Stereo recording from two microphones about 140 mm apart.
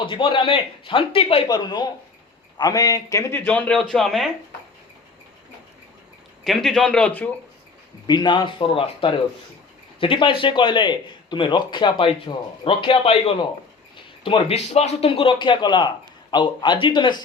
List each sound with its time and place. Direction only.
0.0 s speech: 35° left (ahead or behind)
1.5 s speech: 30° left (ahead or behind); by 4.3 s centre (ahead or behind)
6.4 s a man's voice: centre (ahead or behind)
8.0 s speech: 30° left (ahead or behind)